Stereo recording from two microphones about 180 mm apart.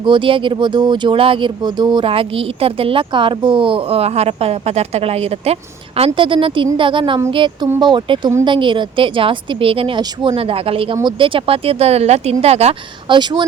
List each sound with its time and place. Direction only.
0.0 s speech: 25° right (ahead or behind)